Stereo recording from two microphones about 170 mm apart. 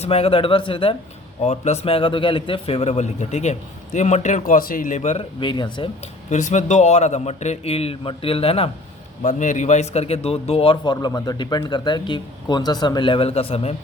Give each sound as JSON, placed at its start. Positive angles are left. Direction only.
{"t": 0.0, "sound": "a man's voice", "side_deg": 35}
{"t": 5.4, "sound": "speech", "side_deg": 25}
{"t": 6.3, "sound": "a man's voice", "side_deg": 45}
{"t": 9.2, "sound": "a man's voice", "side_deg": 45}